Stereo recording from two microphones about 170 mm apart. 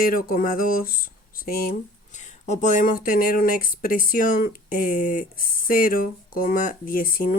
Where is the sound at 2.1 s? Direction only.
45° left (ahead or behind).